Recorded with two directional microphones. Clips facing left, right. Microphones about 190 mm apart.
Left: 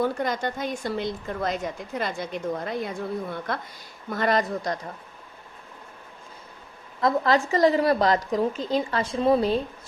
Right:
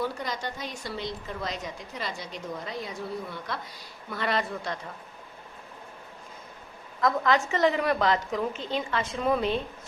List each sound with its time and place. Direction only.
0.0 s a woman's voice: 50° left (ahead or behind)
7.0 s a woman's voice: 35° left (ahead or behind)